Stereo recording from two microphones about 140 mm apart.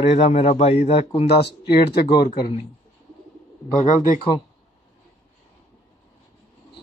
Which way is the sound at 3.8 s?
65° left (ahead or behind).